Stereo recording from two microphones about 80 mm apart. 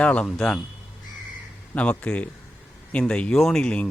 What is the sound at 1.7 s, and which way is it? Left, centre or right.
Speech, centre.